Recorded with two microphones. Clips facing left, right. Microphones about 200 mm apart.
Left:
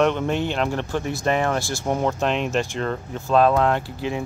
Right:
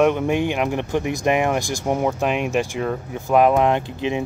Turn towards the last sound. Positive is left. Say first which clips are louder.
# right 3 dB
turn(degrees=-20)  # may be behind; listen again after turning